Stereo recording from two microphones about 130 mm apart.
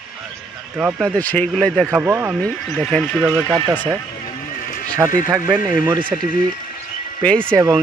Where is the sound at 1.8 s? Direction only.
10° right (ahead or behind).